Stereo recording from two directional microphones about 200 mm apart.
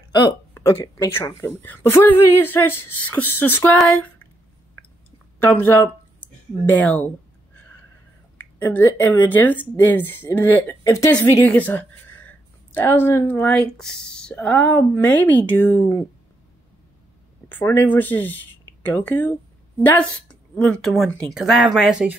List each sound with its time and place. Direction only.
0.6 s speech: 15° left (ahead or behind)
5.5 s speech: 10° left (ahead or behind)
8.4 s speech: 10° left (ahead or behind)
17.5 s speech: 10° left (ahead or behind)